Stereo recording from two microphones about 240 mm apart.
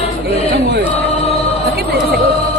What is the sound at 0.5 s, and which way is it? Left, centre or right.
Chant, right.